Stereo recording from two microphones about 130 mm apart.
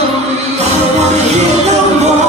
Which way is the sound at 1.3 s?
60° right (ahead or behind).